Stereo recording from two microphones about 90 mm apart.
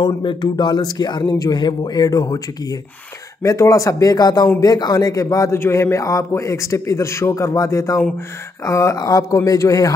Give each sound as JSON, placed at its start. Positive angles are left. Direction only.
{"t": 0.0, "sound": "a man's voice", "side_deg": 60}